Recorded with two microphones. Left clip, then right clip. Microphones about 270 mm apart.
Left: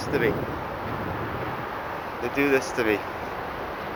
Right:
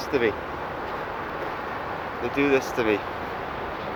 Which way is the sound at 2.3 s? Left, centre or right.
Centre.